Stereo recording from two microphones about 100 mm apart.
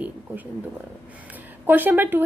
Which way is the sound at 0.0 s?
15° right (ahead or behind).